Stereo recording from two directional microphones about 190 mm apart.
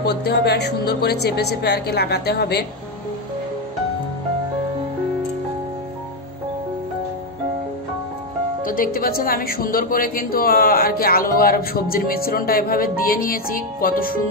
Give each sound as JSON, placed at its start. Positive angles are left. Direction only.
{"t": 0.0, "sound": "speech", "side_deg": 60}
{"t": 8.6, "sound": "a woman's voice", "side_deg": 45}